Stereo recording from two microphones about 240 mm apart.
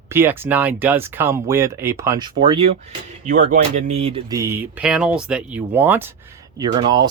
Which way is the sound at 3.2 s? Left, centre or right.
Right.